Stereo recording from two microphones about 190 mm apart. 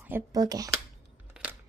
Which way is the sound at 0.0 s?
15° right (ahead or behind).